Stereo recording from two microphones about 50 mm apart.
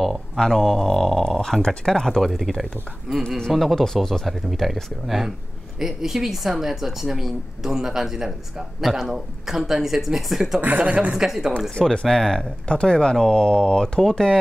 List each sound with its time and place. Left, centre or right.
0.0 s a sound: centre
1.6 s speech: centre
10.6 s speech: right
11.1 s speech: centre
11.9 s speech: centre